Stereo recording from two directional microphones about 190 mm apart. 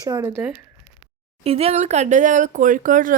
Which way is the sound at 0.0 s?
15° right (ahead or behind).